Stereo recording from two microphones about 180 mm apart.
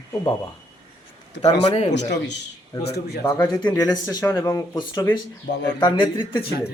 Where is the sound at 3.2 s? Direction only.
10° left (ahead or behind).